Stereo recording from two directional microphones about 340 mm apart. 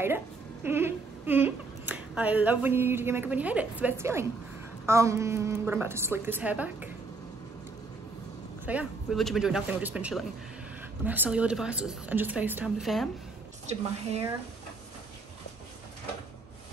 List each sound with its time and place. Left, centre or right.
0.7 s a woman's voice: centre
8.6 s a woman's voice: centre
13.7 s speech: centre